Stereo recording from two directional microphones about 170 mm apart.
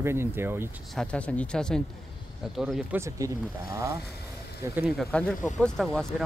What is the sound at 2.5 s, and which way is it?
Speech, 5° right (ahead or behind).